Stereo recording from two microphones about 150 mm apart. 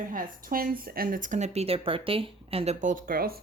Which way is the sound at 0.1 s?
70° right (ahead or behind).